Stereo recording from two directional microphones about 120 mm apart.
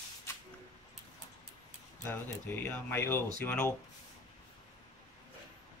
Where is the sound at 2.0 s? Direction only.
20° left (ahead or behind).